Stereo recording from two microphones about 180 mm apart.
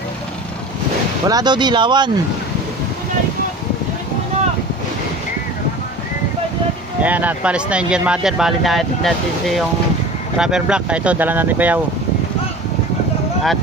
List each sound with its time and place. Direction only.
1.2 s speech: 20° right (ahead or behind)
7.0 s speech: 10° right (ahead or behind)